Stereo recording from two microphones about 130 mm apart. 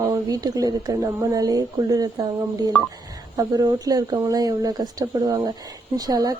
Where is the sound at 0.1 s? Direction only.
30° right (ahead or behind).